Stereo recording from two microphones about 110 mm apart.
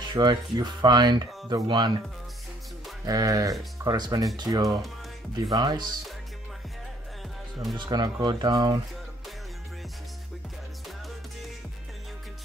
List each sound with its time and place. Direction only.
0.1 s speech: 40° right (ahead or behind)
3.1 s speech: 35° right (ahead or behind)
7.7 s speech: 40° right (ahead or behind)